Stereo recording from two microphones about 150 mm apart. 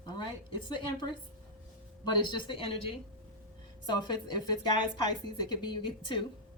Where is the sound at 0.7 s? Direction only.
30° left (ahead or behind).